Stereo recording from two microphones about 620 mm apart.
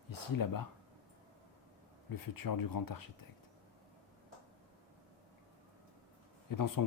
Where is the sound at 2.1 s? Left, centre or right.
Left.